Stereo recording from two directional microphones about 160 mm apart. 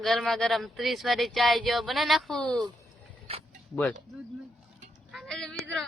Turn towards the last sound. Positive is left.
turn(degrees=5)  # may be behind; listen again after turning